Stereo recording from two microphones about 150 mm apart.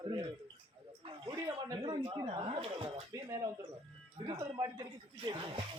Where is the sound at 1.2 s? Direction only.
20° right (ahead or behind); by 3.0 s 40° right (ahead or behind).